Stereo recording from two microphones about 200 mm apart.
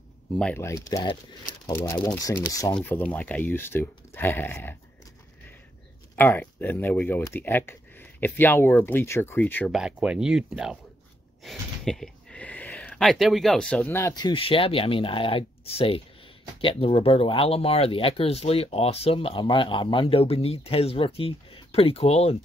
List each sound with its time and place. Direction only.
0.4 s speech: 10° left (ahead or behind)
6.1 s speech: 10° left (ahead or behind)
9.8 s speech: 5° right (ahead or behind); by 22.4 s 30° left (ahead or behind)